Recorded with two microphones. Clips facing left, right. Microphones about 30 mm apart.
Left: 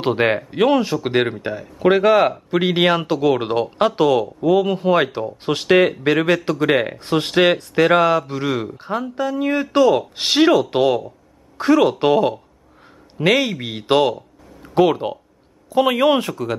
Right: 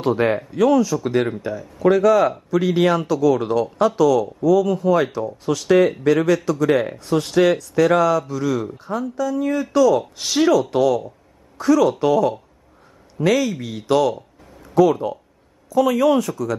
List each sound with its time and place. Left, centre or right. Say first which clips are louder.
0.0 s a woman's voice: left 1 dB; left